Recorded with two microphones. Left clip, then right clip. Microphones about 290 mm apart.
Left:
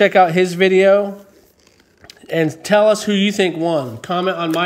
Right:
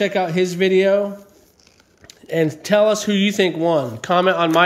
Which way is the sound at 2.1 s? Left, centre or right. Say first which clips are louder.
Left 1 dB; centre.